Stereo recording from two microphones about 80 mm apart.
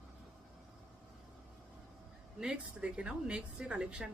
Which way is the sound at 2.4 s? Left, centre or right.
Centre.